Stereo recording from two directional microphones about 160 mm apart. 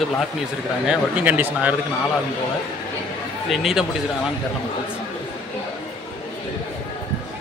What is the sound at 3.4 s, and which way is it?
Speech, centre (ahead or behind).